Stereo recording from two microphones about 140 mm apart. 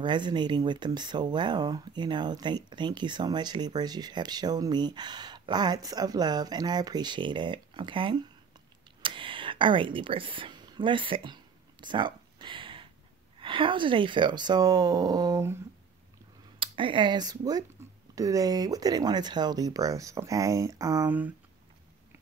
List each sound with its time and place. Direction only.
0.0 s speech: 35° right (ahead or behind)
9.0 s a sound: 35° right (ahead or behind)
13.4 s speech: 40° right (ahead or behind); by 15.6 s 20° right (ahead or behind)
16.5 s speech: 40° right (ahead or behind)